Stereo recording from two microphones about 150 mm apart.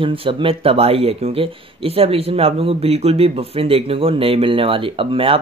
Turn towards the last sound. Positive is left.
turn(degrees=-40)  # may be behind; listen again after turning